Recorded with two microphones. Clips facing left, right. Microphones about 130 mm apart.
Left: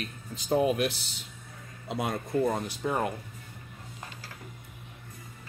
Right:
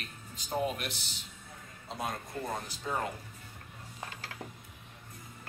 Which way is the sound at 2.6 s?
60° left (ahead or behind).